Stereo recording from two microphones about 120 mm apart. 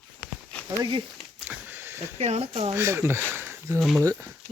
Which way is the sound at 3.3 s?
20° right (ahead or behind).